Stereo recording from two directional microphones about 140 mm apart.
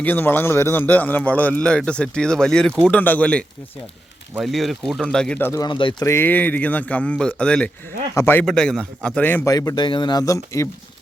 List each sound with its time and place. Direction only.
0.0 s a man's voice: 15° left (ahead or behind)
5.5 s speech: 35° left (ahead or behind)
6.1 s a man's voice: 15° left (ahead or behind)
8.4 s a man's voice: 5° left (ahead or behind); by 10.7 s 20° left (ahead or behind)